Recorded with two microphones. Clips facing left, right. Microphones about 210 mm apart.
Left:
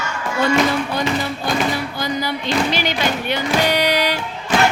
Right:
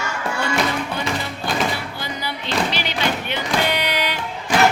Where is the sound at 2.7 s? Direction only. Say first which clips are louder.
Left 3 dB; 40° left (ahead or behind).